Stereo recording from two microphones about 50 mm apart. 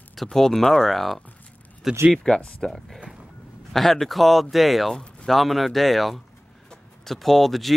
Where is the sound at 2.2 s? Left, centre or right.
Centre.